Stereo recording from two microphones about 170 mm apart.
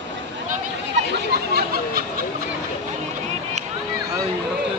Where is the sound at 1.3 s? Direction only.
65° right (ahead or behind).